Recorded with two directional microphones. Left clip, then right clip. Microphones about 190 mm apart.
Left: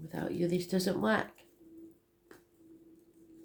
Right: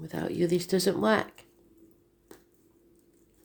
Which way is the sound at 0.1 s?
50° right (ahead or behind).